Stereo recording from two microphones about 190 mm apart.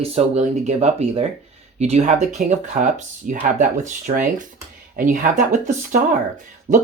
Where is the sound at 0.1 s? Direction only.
35° right (ahead or behind).